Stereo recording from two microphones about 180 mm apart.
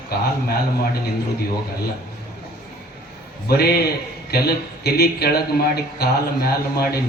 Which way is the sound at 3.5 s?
60° left (ahead or behind).